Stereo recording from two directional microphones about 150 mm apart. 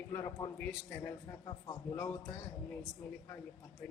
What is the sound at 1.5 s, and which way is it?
Speech, 30° left (ahead or behind).